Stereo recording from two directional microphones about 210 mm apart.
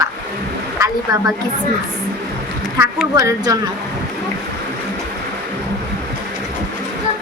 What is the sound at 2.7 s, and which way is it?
Speech, 15° right (ahead or behind).